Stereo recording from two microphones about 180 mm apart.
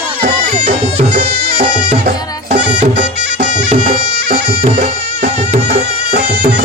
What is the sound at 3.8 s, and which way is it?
Bagpipes, 55° right (ahead or behind).